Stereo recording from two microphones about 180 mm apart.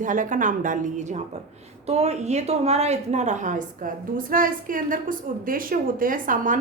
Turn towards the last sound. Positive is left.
turn(degrees=-45)  # may be behind; listen again after turning